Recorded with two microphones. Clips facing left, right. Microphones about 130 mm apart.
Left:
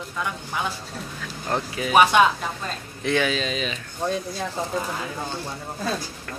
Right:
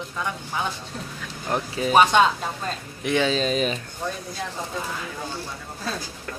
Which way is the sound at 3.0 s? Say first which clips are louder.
Even; 15° right (ahead or behind).